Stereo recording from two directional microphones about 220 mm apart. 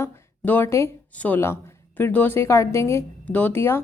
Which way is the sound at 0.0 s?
10° left (ahead or behind).